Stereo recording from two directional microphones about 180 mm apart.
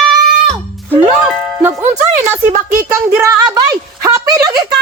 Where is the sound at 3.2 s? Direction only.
20° right (ahead or behind).